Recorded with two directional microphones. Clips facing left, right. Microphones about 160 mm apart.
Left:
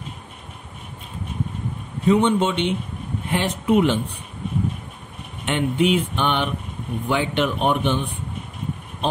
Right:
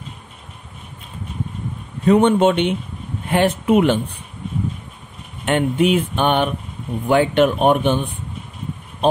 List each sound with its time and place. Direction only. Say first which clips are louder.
2.0 s speech: right 4 dB; 55° right (ahead or behind)
5.4 s speech: right 3 dB; 50° right (ahead or behind)